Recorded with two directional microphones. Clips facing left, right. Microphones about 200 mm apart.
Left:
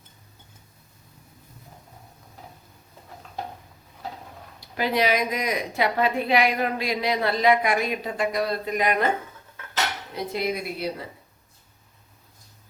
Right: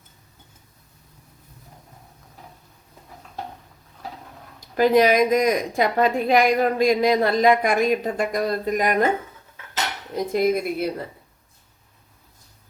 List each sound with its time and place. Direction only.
4.6 s a woman's voice: 45° right (ahead or behind)
10.2 s a woman's voice: 50° right (ahead or behind)